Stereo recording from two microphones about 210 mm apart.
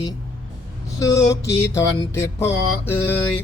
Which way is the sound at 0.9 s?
15° left (ahead or behind).